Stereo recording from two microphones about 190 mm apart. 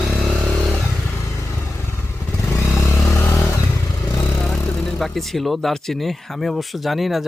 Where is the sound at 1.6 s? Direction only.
15° left (ahead or behind).